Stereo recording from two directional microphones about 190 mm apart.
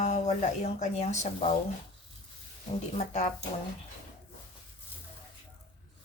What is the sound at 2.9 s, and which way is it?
Speech, 35° left (ahead or behind).